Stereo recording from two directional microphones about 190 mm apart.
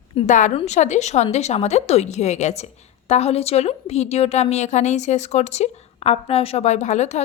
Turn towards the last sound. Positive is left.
turn(degrees=35)  # may be behind; listen again after turning